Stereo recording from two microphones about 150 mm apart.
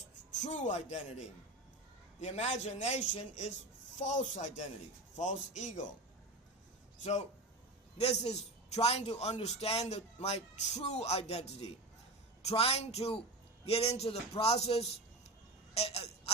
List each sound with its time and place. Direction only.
0.4 s a man's voice: 50° left (ahead or behind)
2.2 s a man's voice: 50° left (ahead or behind)
7.0 s a man's voice: 50° left (ahead or behind)
15.7 s a sound: 45° left (ahead or behind)